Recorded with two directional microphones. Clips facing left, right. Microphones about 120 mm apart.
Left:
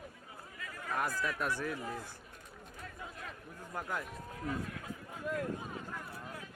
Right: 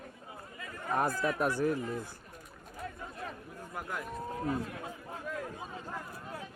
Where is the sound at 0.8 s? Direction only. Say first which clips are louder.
Right 5 dB; 25° right (ahead or behind).